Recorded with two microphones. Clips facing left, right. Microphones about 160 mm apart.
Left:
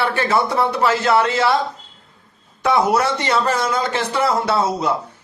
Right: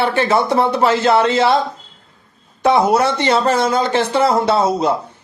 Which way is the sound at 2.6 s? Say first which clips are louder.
Right 3 dB; 25° right (ahead or behind).